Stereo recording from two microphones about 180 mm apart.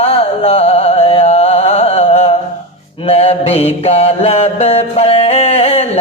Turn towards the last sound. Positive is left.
turn(degrees=35)  # may be behind; listen again after turning